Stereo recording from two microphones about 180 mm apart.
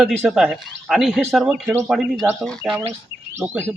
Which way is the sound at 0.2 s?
Centre (ahead or behind).